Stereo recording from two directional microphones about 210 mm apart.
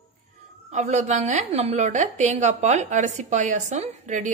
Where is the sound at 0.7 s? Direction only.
35° right (ahead or behind).